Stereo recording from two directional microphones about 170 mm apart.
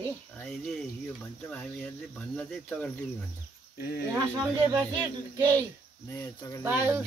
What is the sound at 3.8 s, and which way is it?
Speech, 70° left (ahead or behind).